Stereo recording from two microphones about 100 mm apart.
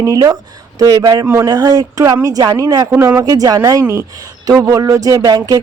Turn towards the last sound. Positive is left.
turn(degrees=-40)  # may be behind; listen again after turning